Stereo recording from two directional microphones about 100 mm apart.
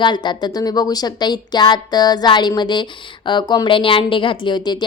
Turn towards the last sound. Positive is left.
turn(degrees=45)  # may be behind; listen again after turning